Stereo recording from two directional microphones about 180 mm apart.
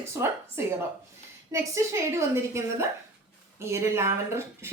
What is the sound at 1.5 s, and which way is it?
Speech, 15° right (ahead or behind).